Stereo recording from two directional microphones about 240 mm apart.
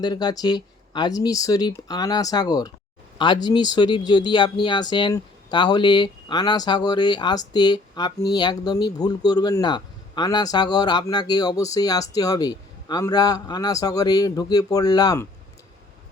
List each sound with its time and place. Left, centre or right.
0.0 s speech: centre